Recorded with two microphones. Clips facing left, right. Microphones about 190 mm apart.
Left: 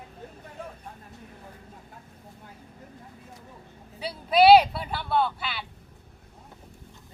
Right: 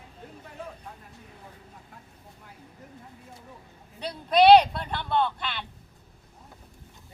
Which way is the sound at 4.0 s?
5° left (ahead or behind).